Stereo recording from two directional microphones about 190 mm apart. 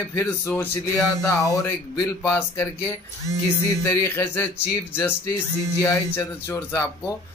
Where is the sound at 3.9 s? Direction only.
15° left (ahead or behind).